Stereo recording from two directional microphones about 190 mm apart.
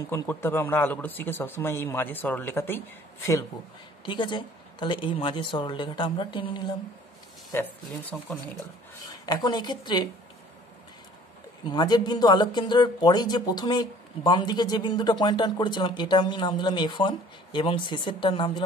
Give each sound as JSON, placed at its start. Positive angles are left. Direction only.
{"t": 0.1, "sound": "speech", "side_deg": 10}
{"t": 4.0, "sound": "speech", "side_deg": 25}
{"t": 7.5, "sound": "speech", "side_deg": 10}
{"t": 9.2, "sound": "speech", "side_deg": 20}
{"t": 11.6, "sound": "speech", "side_deg": 20}